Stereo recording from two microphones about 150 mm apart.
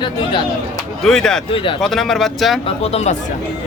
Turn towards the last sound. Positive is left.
turn(degrees=45)  # may be behind; listen again after turning